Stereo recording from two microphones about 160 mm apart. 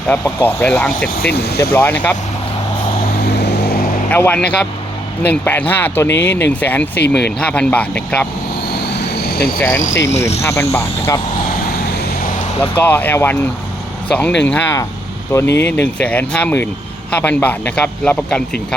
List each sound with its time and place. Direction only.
0.1 s speech: 10° left (ahead or behind)
1.2 s speech: 90° left
1.7 s speech: 10° left (ahead or behind)
3.3 s vehicle: 90° left
4.1 s speech: 10° left (ahead or behind)
8.9 s vehicle: 90° left
9.6 s speech: 15° left (ahead or behind)
10.2 s speech: 40° left (ahead or behind)
10.4 s speech: 15° left (ahead or behind)
12.7 s speech: 10° left (ahead or behind)